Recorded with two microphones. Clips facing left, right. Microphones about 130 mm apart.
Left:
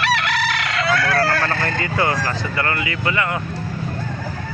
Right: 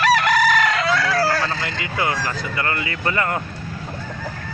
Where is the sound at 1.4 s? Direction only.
50° left (ahead or behind).